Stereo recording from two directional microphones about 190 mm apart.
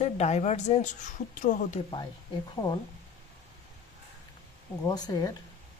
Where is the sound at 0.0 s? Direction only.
35° left (ahead or behind).